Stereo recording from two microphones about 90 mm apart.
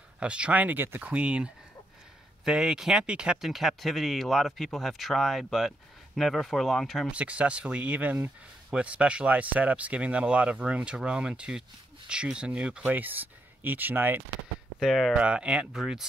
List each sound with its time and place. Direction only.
0.2 s speech: 10° right (ahead or behind)
7.1 s speech: 15° right (ahead or behind)
14.8 s speech: centre (ahead or behind)
15.1 s speech: 10° right (ahead or behind)